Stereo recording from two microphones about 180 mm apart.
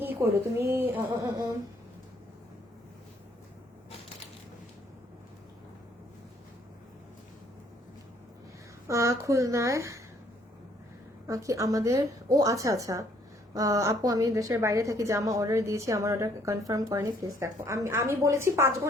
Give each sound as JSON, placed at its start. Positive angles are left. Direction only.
{"t": 0.0, "sound": "a woman's voice", "side_deg": -10}
{"t": 8.9, "sound": "a woman's voice", "side_deg": -15}
{"t": 11.3, "sound": "a woman's voice", "side_deg": -20}